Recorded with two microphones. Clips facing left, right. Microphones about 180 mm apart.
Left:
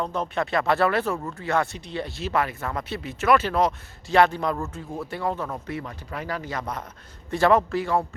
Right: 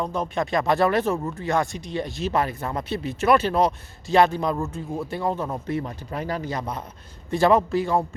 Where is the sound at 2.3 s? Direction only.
35° right (ahead or behind).